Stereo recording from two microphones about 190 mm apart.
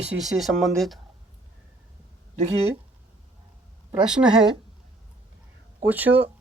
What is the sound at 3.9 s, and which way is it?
Speech, 5° right (ahead or behind).